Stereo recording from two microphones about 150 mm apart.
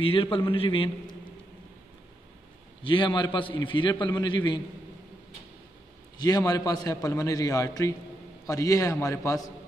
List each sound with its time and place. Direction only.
0.0 s a man's voice: 35° left (ahead or behind)
2.8 s a man's voice: 35° left (ahead or behind)
6.1 s a man's voice: 25° left (ahead or behind)